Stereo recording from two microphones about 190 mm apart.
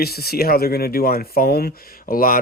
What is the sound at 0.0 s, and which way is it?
Speech, 55° left (ahead or behind).